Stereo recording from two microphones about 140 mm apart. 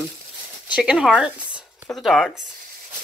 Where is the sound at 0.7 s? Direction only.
5° right (ahead or behind).